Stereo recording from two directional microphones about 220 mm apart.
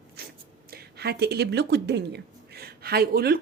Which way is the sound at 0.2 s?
45° right (ahead or behind).